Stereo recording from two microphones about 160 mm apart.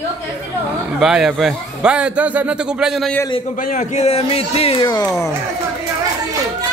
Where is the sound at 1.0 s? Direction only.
5° right (ahead or behind).